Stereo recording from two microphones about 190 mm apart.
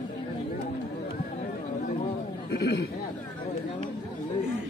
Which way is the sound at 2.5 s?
65° left (ahead or behind).